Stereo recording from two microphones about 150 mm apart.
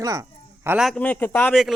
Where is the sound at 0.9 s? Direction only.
10° left (ahead or behind).